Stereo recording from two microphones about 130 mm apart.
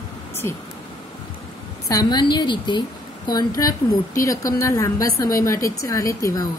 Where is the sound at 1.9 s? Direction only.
30° left (ahead or behind).